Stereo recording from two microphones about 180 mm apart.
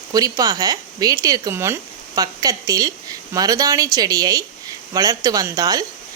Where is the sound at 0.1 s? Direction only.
20° right (ahead or behind).